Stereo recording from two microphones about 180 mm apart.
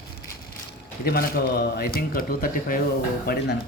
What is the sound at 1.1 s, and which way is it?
Speech, 60° left (ahead or behind).